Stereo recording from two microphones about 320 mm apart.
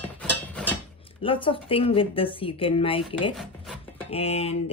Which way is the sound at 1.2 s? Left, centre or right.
Centre.